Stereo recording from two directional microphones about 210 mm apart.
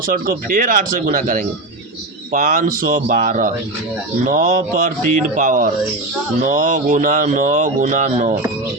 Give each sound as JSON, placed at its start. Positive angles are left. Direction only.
{"t": 0.0, "sound": "speech", "side_deg": -40}